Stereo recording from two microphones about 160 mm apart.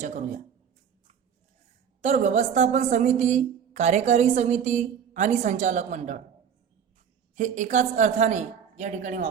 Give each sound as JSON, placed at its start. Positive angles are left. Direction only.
{"t": 0.0, "sound": "a woman's voice", "side_deg": -50}
{"t": 2.0, "sound": "a woman's voice", "side_deg": -45}
{"t": 7.3, "sound": "a woman's voice", "side_deg": -50}